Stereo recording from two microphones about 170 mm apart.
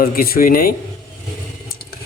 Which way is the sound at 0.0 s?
60° left (ahead or behind).